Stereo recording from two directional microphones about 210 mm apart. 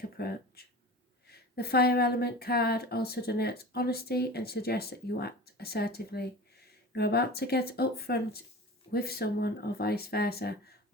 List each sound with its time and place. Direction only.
0.2 s speech: 50° left (ahead or behind)